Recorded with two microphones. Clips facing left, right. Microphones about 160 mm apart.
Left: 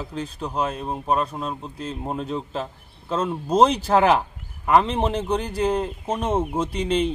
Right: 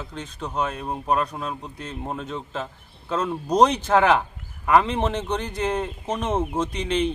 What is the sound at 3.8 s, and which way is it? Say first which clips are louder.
Speech: left 1 dB; 35° left (ahead or behind).